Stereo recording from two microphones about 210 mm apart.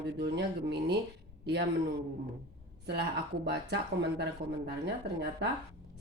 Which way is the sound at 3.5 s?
55° right (ahead or behind).